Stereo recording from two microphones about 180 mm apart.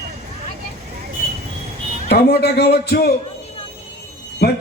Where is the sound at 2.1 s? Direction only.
60° left (ahead or behind).